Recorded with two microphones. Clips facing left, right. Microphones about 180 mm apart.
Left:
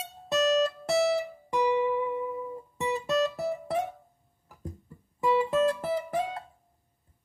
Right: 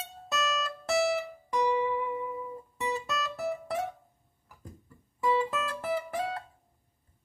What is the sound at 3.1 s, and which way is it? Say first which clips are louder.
Music: left 6 dB; 30° left (ahead or behind).